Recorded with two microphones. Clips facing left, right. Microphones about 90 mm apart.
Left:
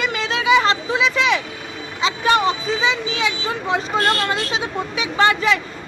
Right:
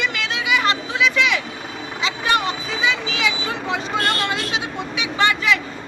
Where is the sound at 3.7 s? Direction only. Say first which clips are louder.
Left 4 dB; 35° left (ahead or behind).